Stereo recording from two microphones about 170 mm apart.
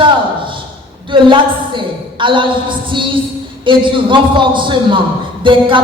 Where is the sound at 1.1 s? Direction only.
30° right (ahead or behind).